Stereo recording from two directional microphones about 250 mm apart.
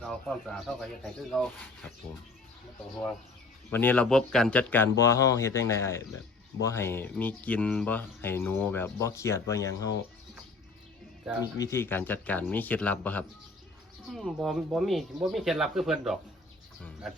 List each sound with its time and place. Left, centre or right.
0.0 s speech: centre
3.7 s speech: centre
11.5 s speech: centre